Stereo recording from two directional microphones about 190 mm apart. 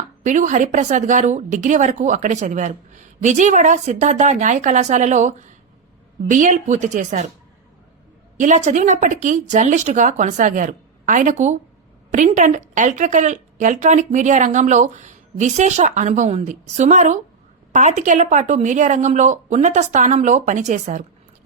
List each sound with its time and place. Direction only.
0.3 s a woman's voice: 40° right (ahead or behind)
8.4 s a woman's voice: 40° right (ahead or behind)